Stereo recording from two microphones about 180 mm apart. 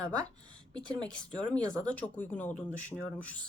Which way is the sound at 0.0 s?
25° right (ahead or behind).